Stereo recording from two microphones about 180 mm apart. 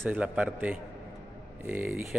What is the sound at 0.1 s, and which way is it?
A man's voice, 5° right (ahead or behind).